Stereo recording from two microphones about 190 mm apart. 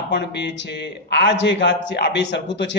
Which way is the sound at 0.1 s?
65° left (ahead or behind).